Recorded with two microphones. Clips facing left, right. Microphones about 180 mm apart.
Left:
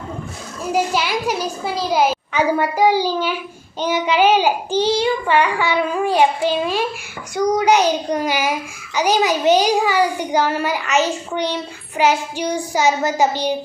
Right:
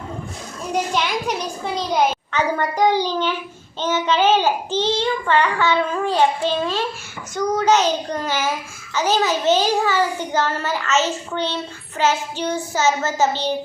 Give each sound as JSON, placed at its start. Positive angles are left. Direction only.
{"t": 0.7, "sound": "a child's voice", "side_deg": 5}